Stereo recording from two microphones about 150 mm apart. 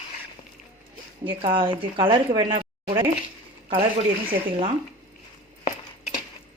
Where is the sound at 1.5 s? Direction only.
35° right (ahead or behind).